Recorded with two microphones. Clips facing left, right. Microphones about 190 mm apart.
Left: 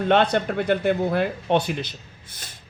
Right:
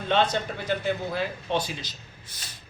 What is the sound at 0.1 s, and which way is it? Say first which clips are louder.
A man's voice: left 4 dB; 60° left (ahead or behind).